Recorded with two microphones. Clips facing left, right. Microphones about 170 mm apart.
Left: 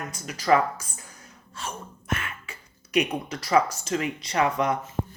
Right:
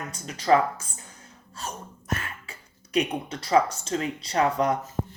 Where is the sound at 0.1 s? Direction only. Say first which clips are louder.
Right 1 dB; 30° right (ahead or behind).